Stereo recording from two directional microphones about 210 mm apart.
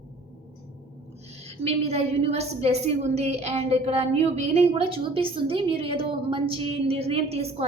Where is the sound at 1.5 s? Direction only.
30° right (ahead or behind).